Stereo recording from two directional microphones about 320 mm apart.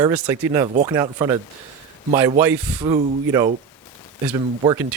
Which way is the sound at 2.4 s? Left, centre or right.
Centre.